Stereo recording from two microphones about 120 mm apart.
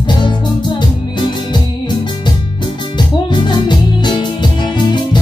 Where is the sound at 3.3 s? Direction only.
40° left (ahead or behind).